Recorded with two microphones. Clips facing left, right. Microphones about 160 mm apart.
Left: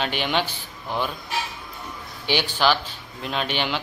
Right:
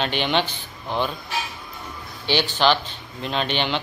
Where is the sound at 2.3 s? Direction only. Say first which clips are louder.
Right 2 dB; 10° left (ahead or behind).